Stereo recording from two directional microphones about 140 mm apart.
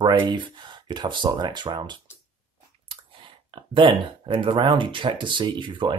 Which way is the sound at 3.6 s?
35° right (ahead or behind).